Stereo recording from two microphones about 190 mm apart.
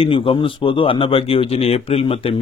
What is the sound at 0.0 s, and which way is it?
Speech, 30° left (ahead or behind).